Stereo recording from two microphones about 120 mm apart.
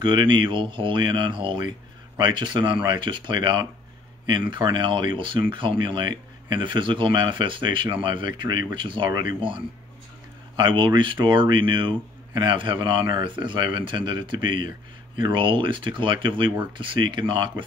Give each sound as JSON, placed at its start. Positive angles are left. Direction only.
{"t": 0.0, "sound": "speech", "side_deg": -40}
{"t": 10.5, "sound": "speech", "side_deg": -40}